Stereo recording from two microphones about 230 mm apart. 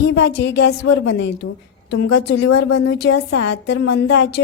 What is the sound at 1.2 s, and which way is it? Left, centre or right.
Speech, left.